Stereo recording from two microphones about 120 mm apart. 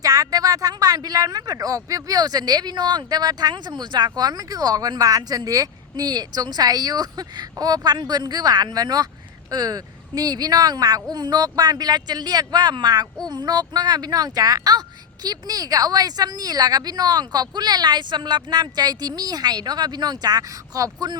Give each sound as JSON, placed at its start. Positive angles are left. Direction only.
{"t": 0.0, "sound": "speech", "side_deg": -30}